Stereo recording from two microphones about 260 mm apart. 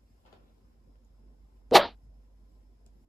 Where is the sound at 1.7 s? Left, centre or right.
Centre.